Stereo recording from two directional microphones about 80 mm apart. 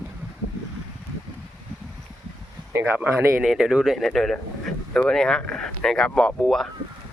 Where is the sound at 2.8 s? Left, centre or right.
Centre.